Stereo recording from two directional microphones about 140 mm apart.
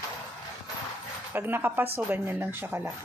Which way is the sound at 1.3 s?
15° right (ahead or behind).